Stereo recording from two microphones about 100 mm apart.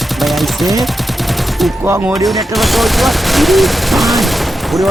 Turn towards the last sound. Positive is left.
turn(degrees=0)  # may be behind; listen again after turning